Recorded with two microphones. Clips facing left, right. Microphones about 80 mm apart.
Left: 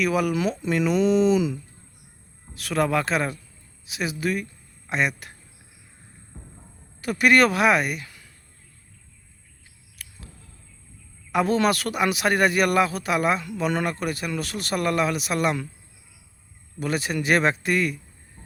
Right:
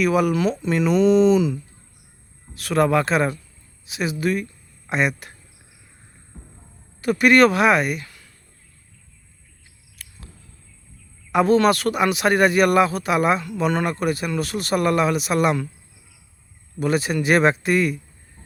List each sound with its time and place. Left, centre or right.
0.0 s speech: centre
6.3 s a sound: centre
7.0 s speech: centre
10.0 s a sound: centre
11.3 s speech: centre
16.8 s a man's voice: centre